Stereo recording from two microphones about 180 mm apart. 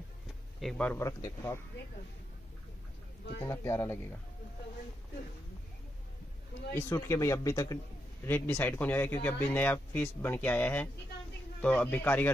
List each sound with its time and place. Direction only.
0.6 s speech: 5° left (ahead or behind)
3.4 s speech: 15° left (ahead or behind)
6.7 s speech: 15° left (ahead or behind)